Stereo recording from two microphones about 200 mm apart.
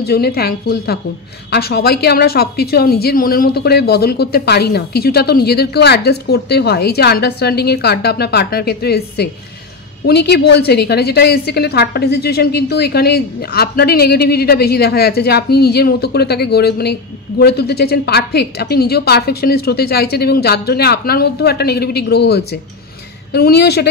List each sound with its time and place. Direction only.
0.0 s a woman's voice: 50° left (ahead or behind)